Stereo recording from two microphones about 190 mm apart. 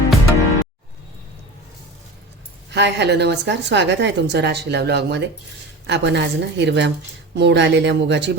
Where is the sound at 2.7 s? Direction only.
65° right (ahead or behind).